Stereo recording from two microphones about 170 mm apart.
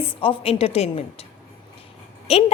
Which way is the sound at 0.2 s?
35° left (ahead or behind).